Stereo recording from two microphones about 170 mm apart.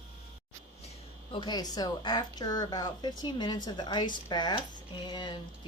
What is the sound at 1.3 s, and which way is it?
Speech, 30° left (ahead or behind).